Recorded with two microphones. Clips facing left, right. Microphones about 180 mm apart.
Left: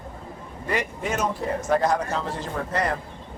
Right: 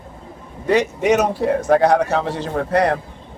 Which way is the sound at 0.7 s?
80° right.